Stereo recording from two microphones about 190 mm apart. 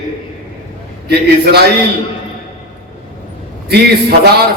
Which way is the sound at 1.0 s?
60° right (ahead or behind).